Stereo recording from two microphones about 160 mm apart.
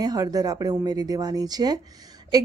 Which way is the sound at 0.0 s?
25° right (ahead or behind).